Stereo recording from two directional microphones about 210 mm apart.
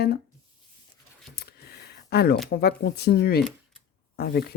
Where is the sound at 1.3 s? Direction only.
50° left (ahead or behind).